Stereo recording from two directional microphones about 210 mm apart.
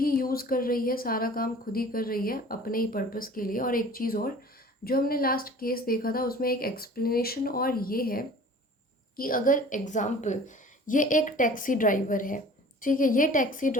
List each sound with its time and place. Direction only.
0.0 s a woman's voice: 45° left (ahead or behind)